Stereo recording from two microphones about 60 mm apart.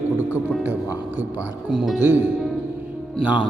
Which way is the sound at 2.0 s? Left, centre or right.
Right.